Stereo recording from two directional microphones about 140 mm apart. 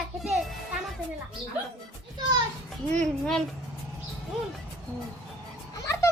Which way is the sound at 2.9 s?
5° left (ahead or behind).